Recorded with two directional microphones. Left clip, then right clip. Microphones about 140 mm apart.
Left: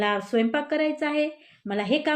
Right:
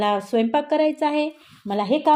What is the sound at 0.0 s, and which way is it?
A woman's voice, 40° right (ahead or behind).